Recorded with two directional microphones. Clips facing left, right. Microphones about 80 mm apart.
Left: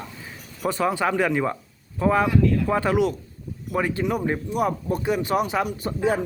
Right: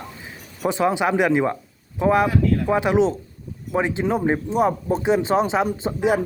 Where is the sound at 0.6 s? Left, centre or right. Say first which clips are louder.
Right 3 dB; centre.